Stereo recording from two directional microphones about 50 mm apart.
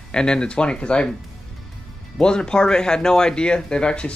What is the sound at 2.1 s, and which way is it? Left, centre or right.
Speech, centre.